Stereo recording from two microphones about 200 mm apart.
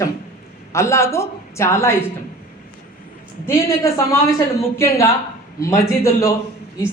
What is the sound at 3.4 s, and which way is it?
Speech, 15° left (ahead or behind).